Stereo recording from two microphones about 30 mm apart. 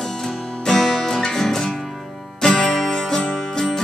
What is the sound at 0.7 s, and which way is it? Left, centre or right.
Music, centre.